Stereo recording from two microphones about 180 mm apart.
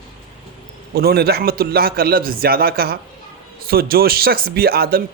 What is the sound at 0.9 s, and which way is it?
A man's voice, 60° right (ahead or behind).